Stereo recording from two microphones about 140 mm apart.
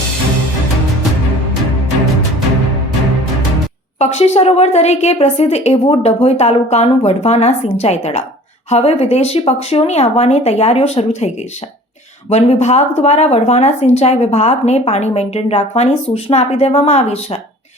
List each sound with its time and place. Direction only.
3.9 s a woman's voice: 50° left (ahead or behind)
12.3 s a woman's voice: 50° left (ahead or behind)